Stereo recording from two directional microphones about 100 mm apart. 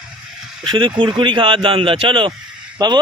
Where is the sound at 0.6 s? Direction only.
50° right (ahead or behind).